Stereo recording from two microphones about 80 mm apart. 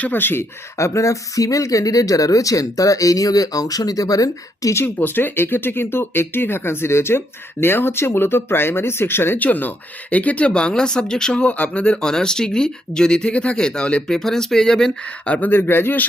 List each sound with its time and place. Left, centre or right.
0.0 s speech: left
0.8 s speech: left
4.7 s speech: left